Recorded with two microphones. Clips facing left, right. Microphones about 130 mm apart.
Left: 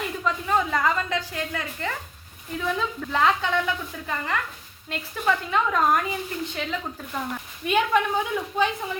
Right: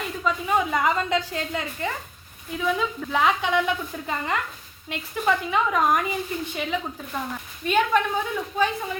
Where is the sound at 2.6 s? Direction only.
5° right (ahead or behind).